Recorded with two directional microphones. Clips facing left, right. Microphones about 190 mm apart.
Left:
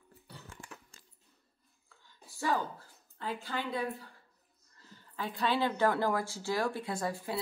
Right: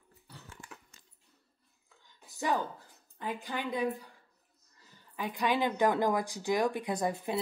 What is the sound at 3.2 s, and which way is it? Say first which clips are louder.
Speech: right 1 dB; 15° right (ahead or behind).